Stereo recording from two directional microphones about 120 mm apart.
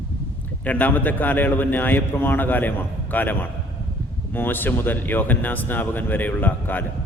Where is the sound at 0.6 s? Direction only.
15° left (ahead or behind).